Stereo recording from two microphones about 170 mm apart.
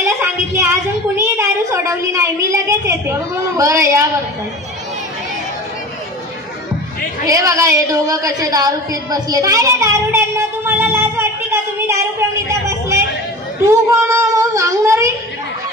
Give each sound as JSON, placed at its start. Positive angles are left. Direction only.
{"t": 0.0, "sound": "child singing", "side_deg": -15}
{"t": 1.3, "sound": "a sound", "side_deg": -15}
{"t": 2.8, "sound": "a woman's voice", "side_deg": -15}
{"t": 7.2, "sound": "a woman's voice", "side_deg": -20}
{"t": 12.4, "sound": "a sound", "side_deg": -15}
{"t": 13.7, "sound": "child singing", "side_deg": -15}